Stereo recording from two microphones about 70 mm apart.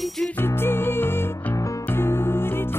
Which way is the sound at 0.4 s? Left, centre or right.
Left.